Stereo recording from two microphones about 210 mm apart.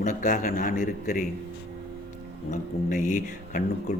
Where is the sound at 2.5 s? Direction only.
40° left (ahead or behind).